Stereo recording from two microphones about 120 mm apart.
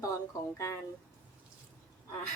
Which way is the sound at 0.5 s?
25° left (ahead or behind).